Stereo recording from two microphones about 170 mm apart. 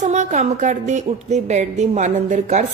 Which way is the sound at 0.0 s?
45° right (ahead or behind).